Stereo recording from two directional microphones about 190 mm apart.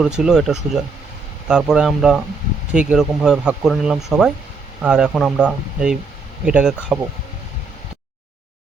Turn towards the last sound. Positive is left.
turn(degrees=-5)  # may be behind; listen again after turning